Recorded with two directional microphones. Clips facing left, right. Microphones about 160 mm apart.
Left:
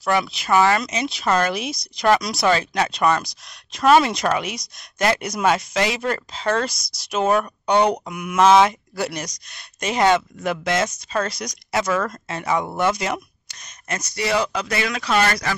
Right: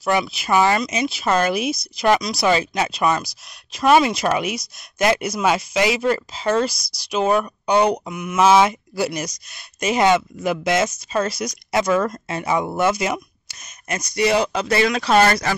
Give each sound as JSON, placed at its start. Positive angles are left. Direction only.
{"t": 0.0, "sound": "speech", "side_deg": -10}
{"t": 8.1, "sound": "speech", "side_deg": 10}
{"t": 8.4, "sound": "speech", "side_deg": -5}
{"t": 14.1, "sound": "speech", "side_deg": -20}